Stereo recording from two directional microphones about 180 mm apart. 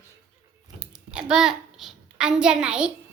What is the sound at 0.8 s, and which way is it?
A child's voice, 5° right (ahead or behind).